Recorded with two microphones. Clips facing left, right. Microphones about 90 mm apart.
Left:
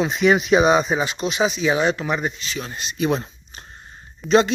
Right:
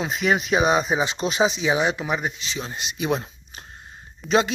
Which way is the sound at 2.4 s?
20° right (ahead or behind).